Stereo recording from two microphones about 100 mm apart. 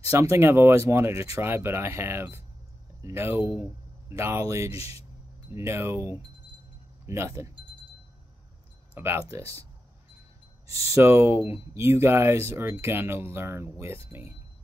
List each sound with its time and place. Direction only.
0.1 s speech: 30° right (ahead or behind)
4.6 s speech: 90° left
5.5 s speech: 25° right (ahead or behind)
8.9 s speech: 25° right (ahead or behind)
10.7 s speech: 35° right (ahead or behind)